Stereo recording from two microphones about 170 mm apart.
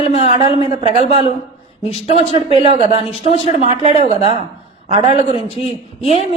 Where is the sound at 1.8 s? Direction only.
35° left (ahead or behind).